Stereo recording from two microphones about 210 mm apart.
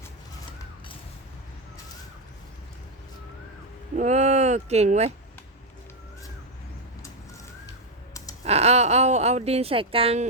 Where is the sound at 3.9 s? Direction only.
35° right (ahead or behind).